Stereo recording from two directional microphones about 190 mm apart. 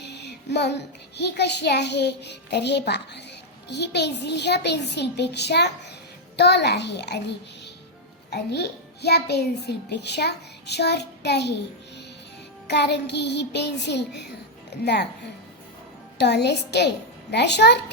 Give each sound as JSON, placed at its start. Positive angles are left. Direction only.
{"t": 0.0, "sound": "a child's voice", "side_deg": 65}
{"t": 12.6, "sound": "a child's voice", "side_deg": 65}
{"t": 16.1, "sound": "a child's voice", "side_deg": 60}